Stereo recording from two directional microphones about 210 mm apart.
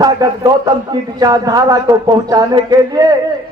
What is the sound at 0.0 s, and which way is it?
A man's voice, 15° right (ahead or behind).